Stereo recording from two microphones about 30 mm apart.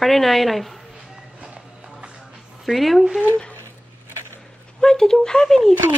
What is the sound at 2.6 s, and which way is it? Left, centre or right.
Speech, centre.